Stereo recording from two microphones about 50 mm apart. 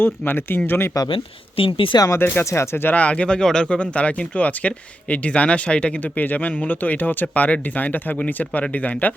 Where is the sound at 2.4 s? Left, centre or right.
Left.